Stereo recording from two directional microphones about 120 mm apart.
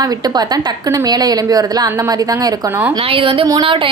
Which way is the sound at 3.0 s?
50° right (ahead or behind).